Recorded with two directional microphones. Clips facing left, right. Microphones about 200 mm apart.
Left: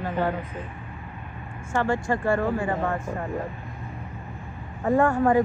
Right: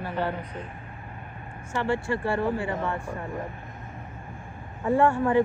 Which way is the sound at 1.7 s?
45° left (ahead or behind).